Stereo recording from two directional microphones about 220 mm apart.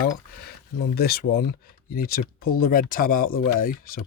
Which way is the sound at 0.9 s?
45° left (ahead or behind).